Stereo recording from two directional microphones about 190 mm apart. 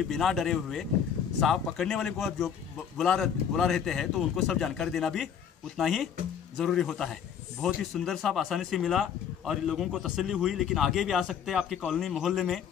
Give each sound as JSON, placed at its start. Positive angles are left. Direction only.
{"t": 0.1, "sound": "speech", "side_deg": 0}